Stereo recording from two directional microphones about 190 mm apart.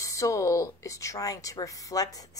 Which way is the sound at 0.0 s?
15° left (ahead or behind).